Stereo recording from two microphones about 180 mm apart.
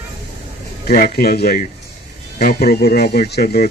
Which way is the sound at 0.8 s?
60° left (ahead or behind).